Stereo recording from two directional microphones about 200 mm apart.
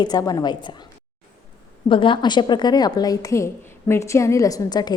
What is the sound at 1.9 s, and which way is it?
A woman's voice, 25° left (ahead or behind).